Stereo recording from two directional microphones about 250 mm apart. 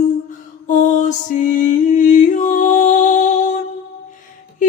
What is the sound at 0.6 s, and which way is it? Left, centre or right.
Music, left.